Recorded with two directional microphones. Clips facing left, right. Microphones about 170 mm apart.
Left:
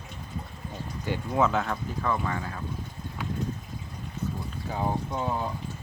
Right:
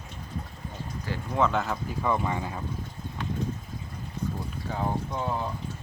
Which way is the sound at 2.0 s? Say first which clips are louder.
Right 2 dB; 15° right (ahead or behind).